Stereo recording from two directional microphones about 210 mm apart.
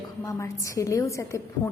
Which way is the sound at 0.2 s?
15° left (ahead or behind).